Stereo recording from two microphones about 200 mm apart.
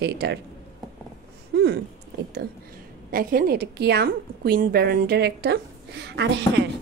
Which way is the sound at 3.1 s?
45° right (ahead or behind).